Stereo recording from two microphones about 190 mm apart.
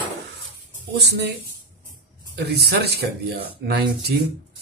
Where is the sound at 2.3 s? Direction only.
60° right (ahead or behind).